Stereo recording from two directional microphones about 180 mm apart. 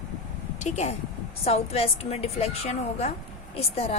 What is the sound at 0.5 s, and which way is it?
A woman's voice, 40° left (ahead or behind).